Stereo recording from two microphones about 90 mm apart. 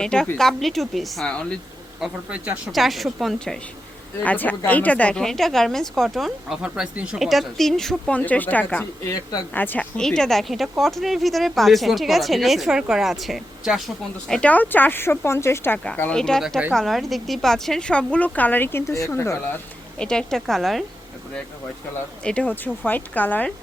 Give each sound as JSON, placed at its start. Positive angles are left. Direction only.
{"t": 0.0, "sound": "a woman's voice", "side_deg": 10}
{"t": 2.0, "sound": "speech", "side_deg": -15}
{"t": 2.7, "sound": "a woman's voice", "side_deg": 0}
{"t": 4.2, "sound": "a woman's voice", "side_deg": 15}
{"t": 8.1, "sound": "speech", "side_deg": 15}
{"t": 10.0, "sound": "a woman's voice", "side_deg": 5}
{"t": 14.5, "sound": "speech", "side_deg": 20}
{"t": 16.1, "sound": "speech", "side_deg": 5}
{"t": 20.0, "sound": "a woman's voice", "side_deg": 10}
{"t": 22.2, "sound": "speech", "side_deg": 10}